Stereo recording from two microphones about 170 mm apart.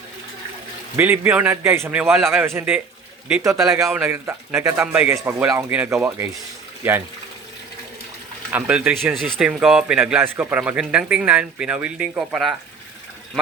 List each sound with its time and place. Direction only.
0.9 s a man's voice: 10° right (ahead or behind)
3.8 s a man's voice: 5° right (ahead or behind)
8.5 s a man's voice: 10° right (ahead or behind)
9.1 s a man's voice: centre (ahead or behind)